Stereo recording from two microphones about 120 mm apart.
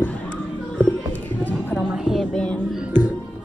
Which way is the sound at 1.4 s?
10° left (ahead or behind).